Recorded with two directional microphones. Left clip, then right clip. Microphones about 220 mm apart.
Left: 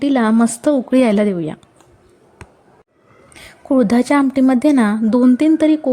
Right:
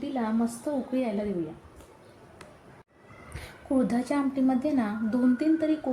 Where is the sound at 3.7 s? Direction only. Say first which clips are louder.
Left 13 dB; 45° left (ahead or behind).